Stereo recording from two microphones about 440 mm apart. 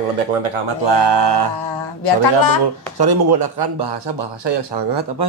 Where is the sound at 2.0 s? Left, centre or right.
Left.